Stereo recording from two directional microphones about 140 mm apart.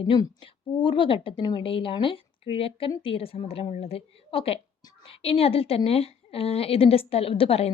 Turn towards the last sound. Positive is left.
turn(degrees=45)  # may be behind; listen again after turning